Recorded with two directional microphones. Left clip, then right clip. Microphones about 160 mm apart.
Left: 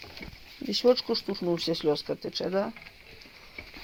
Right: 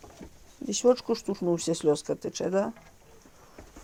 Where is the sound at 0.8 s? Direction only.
15° right (ahead or behind).